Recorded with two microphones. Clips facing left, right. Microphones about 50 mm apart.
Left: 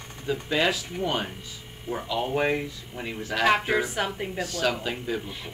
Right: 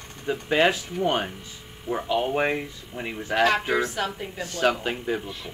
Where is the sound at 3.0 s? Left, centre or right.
Right.